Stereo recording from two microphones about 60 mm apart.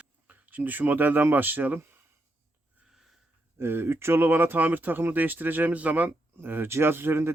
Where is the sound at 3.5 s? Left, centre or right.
Right.